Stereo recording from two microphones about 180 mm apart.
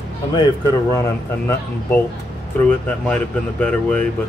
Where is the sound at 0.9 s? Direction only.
15° left (ahead or behind).